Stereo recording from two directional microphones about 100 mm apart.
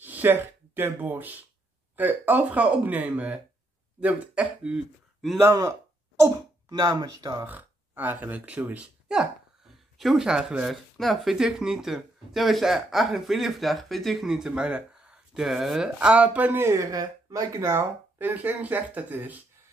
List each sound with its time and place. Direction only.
0.0 s speech: 20° right (ahead or behind)
5.4 s speech: 25° right (ahead or behind)
6.2 s speech: 40° right (ahead or behind)
7.4 s speech: 20° right (ahead or behind)
16.6 s speech: 30° right (ahead or behind)